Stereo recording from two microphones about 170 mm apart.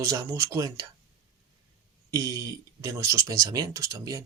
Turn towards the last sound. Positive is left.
turn(degrees=-20)  # may be behind; listen again after turning